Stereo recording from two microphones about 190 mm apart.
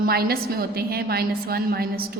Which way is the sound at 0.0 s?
55° right (ahead or behind).